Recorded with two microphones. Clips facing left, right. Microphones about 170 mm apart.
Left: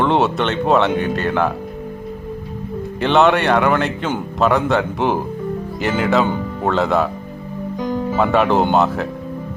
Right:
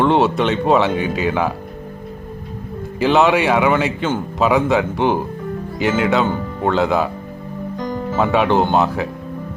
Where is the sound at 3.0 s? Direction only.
Centre (ahead or behind).